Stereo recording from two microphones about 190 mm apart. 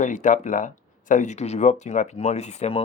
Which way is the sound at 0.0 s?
40° left (ahead or behind).